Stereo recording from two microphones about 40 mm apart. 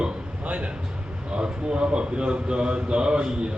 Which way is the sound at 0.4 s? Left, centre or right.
Right.